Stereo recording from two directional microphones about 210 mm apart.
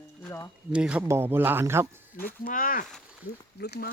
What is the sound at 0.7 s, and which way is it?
Speech, 5° right (ahead or behind).